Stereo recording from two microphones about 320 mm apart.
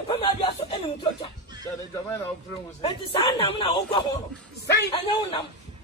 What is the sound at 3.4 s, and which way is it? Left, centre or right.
A man's voice, centre.